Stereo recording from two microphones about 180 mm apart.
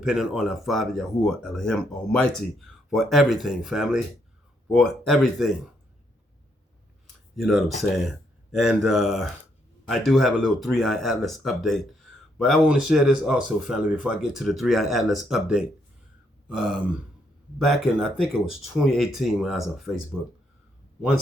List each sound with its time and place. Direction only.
0.0 s speech: 5° right (ahead or behind)
7.3 s speech: centre (ahead or behind)
18.2 s speech: 5° right (ahead or behind)